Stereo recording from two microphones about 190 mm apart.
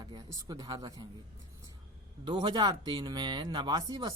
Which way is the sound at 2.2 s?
25° right (ahead or behind).